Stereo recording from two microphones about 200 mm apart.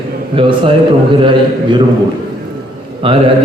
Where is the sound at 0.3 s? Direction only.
25° right (ahead or behind).